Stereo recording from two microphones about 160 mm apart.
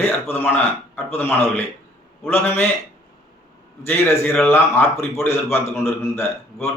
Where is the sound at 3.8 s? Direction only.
15° left (ahead or behind).